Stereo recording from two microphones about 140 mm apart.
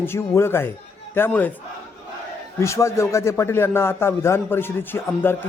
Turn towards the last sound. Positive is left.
turn(degrees=15)  # may be behind; listen again after turning